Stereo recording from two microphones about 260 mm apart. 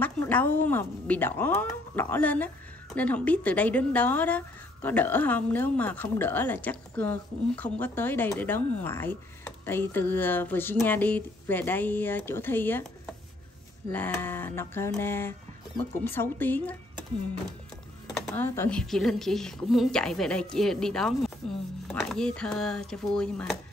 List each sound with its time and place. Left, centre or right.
0.0 s a woman's voice: centre
13.8 s a woman's voice: centre
18.1 s speech: centre